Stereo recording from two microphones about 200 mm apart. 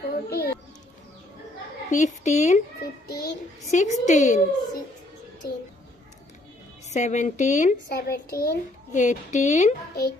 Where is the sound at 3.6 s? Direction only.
35° left (ahead or behind).